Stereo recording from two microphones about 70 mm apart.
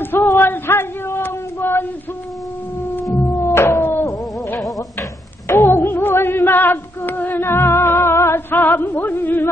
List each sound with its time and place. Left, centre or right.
0.0 s a sound: left
3.2 s cat: left
4.6 s music: centre
5.5 s female singing: left